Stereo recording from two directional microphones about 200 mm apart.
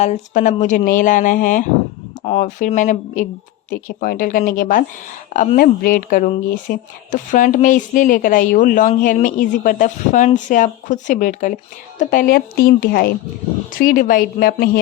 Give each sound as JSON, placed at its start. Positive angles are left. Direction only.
{"t": 0.0, "sound": "speech", "side_deg": 35}